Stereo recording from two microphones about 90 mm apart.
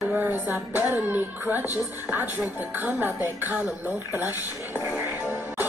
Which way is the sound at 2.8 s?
20° right (ahead or behind).